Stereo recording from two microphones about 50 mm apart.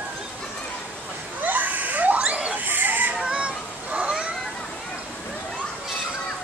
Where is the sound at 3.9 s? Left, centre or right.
Right.